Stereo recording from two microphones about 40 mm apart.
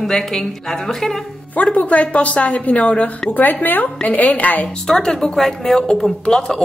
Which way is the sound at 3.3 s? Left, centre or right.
Left.